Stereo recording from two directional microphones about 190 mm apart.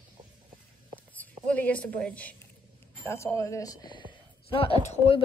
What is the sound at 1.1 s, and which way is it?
A woman's voice, 10° left (ahead or behind).